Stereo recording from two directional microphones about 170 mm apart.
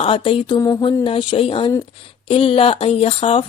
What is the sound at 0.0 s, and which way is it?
Speech, 30° left (ahead or behind).